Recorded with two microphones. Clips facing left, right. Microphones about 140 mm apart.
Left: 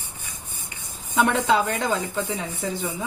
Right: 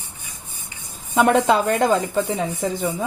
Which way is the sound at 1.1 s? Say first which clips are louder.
Right 4 dB; 50° right (ahead or behind).